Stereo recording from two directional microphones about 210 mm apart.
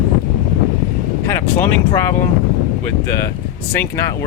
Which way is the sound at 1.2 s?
10° left (ahead or behind).